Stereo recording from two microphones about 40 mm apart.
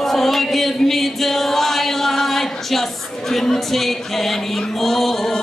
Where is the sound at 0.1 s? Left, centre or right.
Centre.